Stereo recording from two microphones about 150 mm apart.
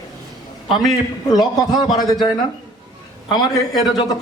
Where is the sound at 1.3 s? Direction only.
25° left (ahead or behind).